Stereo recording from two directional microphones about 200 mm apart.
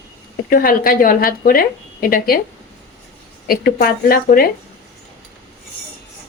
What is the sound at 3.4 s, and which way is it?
A woman's voice, 50° left (ahead or behind).